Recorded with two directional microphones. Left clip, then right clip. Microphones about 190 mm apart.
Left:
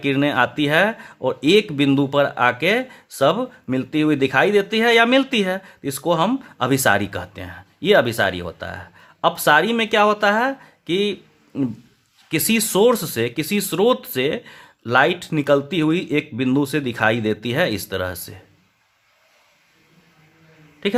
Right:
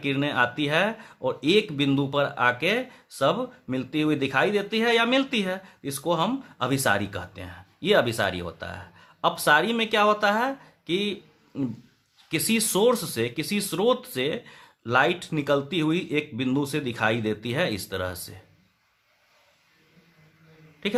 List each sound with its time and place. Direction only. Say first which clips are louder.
0.0 s speech: left 6 dB; 30° left (ahead or behind)
20.8 s speech: left 6 dB; 25° left (ahead or behind)